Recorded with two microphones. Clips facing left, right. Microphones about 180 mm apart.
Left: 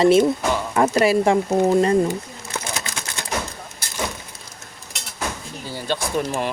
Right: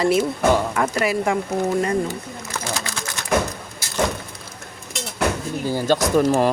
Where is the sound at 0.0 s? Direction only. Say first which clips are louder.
Left 3 dB; 25° left (ahead or behind).